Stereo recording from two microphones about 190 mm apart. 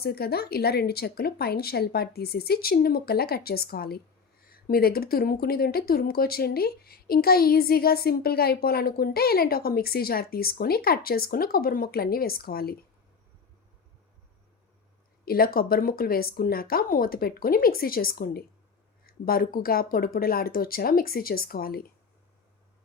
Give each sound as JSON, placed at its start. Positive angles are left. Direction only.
{"t": 0.0, "sound": "speech", "side_deg": 55}
{"t": 15.2, "sound": "speech", "side_deg": 50}